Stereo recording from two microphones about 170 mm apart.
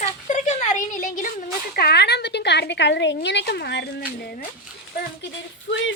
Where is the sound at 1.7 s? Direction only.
70° left (ahead or behind).